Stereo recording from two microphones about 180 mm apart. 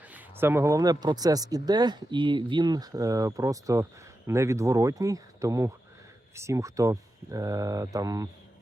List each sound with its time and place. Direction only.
0.1 s speech: 10° right (ahead or behind)